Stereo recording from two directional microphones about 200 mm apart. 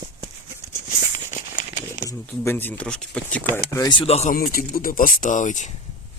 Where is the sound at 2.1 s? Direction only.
10° left (ahead or behind); by 4.3 s 30° left (ahead or behind).